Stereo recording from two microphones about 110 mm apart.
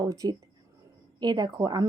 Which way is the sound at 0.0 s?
35° right (ahead or behind).